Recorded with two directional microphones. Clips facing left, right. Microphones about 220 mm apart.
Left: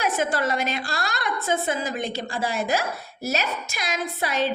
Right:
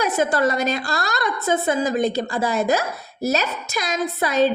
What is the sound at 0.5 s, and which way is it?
A woman's voice, 40° right (ahead or behind).